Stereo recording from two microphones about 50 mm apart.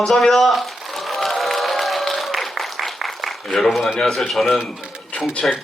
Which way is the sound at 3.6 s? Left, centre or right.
Centre.